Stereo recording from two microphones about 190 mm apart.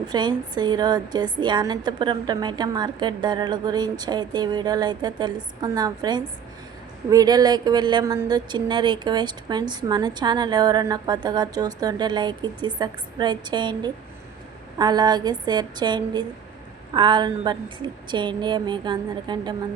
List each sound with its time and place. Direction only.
0.1 s speech: 25° right (ahead or behind)